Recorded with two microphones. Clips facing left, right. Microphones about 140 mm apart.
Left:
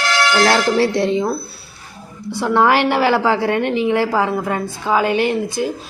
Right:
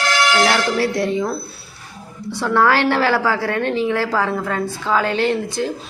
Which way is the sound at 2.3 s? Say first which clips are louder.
Left 2 dB; 15° left (ahead or behind).